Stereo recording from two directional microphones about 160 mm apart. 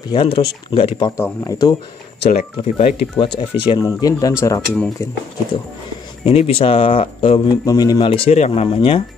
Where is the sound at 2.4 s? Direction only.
45° left (ahead or behind).